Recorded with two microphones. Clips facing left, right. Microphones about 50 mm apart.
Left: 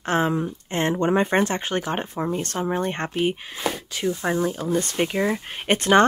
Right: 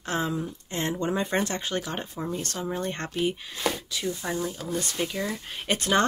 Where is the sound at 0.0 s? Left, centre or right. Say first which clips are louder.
Left 6 dB; left.